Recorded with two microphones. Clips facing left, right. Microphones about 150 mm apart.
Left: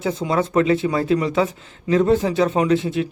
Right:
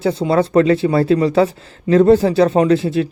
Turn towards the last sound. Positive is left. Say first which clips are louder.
# right 5 dB
turn(degrees=-35)  # may be behind; listen again after turning